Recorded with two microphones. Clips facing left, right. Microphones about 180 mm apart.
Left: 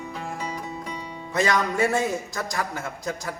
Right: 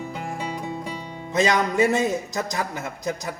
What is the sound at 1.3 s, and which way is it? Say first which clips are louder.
Speech: right 3 dB; 20° right (ahead or behind).